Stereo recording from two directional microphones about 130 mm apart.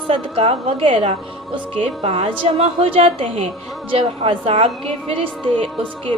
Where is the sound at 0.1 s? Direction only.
45° right (ahead or behind).